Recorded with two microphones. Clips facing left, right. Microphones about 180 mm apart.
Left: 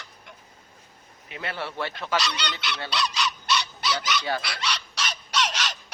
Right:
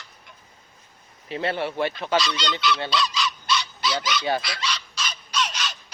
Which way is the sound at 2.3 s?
65° left (ahead or behind).